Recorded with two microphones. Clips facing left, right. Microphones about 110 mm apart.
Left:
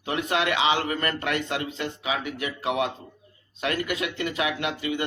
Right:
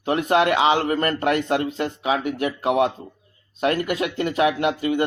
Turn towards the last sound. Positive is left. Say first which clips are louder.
# right 7 dB
turn(degrees=-45)  # may be behind; listen again after turning